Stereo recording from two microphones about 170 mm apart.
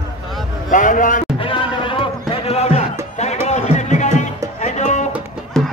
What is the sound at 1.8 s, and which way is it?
Music, 30° left (ahead or behind).